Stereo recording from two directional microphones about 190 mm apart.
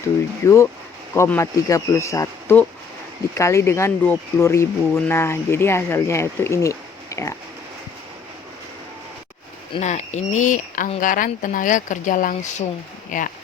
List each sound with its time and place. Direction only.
0.4 s speech: 15° left (ahead or behind)
9.7 s speech: 35° left (ahead or behind)